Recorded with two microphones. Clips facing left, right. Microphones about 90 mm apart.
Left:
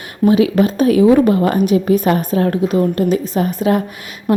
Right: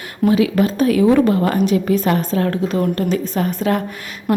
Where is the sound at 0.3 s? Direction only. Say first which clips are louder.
Left 3 dB; 20° left (ahead or behind).